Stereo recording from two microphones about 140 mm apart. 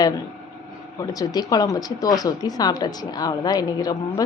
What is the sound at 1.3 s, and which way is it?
Speech, 25° left (ahead or behind).